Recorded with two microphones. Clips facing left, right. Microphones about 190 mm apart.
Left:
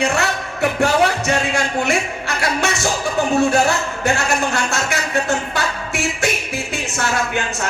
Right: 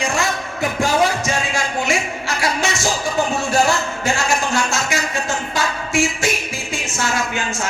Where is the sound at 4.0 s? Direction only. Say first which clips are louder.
Left 1 dB; 60° left (ahead or behind).